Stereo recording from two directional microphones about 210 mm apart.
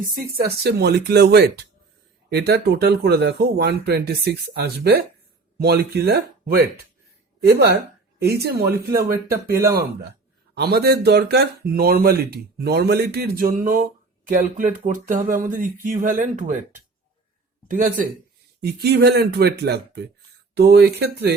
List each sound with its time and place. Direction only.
0.1 s speech: 45° right (ahead or behind)
18.6 s speech: 50° right (ahead or behind)